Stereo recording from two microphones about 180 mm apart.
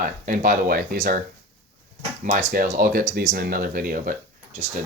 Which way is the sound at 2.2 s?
45° right (ahead or behind).